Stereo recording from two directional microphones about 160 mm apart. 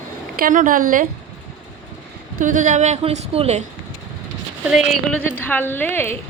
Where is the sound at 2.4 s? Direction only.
50° right (ahead or behind).